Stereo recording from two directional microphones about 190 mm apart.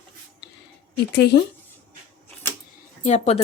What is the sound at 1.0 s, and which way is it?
Speech, 60° left (ahead or behind).